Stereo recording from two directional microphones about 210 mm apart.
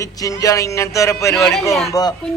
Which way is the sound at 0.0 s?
15° left (ahead or behind).